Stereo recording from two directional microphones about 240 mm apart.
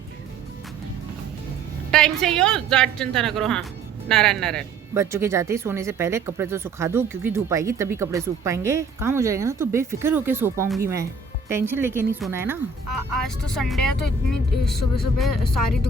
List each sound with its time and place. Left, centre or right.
1.9 s a woman's voice: centre
4.9 s speech: centre
13.2 s a woman's voice: centre
14.7 s speech: left